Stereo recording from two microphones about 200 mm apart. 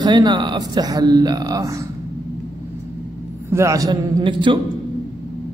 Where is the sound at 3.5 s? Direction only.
15° right (ahead or behind).